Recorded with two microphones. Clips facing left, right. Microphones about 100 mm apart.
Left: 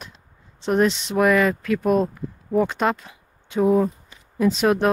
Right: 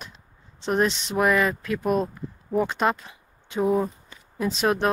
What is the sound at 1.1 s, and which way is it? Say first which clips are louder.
Speech: left 3 dB; 15° right (ahead or behind).